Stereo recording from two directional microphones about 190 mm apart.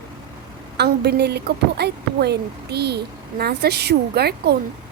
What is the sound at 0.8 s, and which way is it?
A woman's voice, 60° right (ahead or behind).